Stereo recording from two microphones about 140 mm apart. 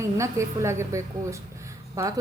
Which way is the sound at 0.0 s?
20° right (ahead or behind).